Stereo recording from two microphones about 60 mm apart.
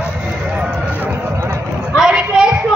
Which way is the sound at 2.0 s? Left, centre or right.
Centre.